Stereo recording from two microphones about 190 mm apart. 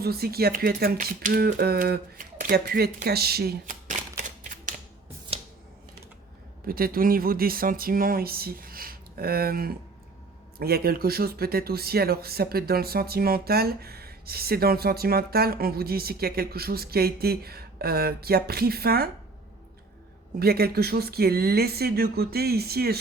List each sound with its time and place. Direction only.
0.0 s speech: 55° right (ahead or behind)
4.2 s typewriter: 45° right (ahead or behind)
5.3 s scissors: 30° right (ahead or behind)
6.7 s speech: 50° right (ahead or behind)
20.4 s speech: 55° right (ahead or behind)